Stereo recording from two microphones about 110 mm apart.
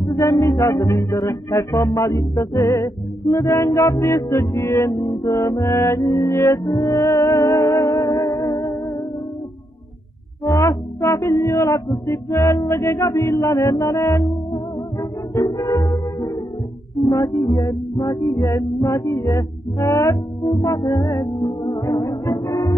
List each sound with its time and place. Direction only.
0.0 s music: 30° left (ahead or behind)
10.4 s music: 30° left (ahead or behind)